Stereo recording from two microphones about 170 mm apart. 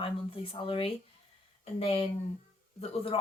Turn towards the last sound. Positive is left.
turn(degrees=35)  # may be behind; listen again after turning